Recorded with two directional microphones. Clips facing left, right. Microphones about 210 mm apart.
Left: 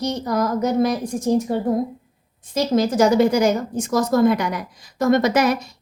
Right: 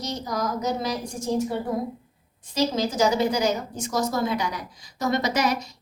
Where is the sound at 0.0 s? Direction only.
60° left (ahead or behind).